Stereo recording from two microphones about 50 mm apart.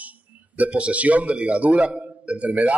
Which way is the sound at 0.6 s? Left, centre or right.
Right.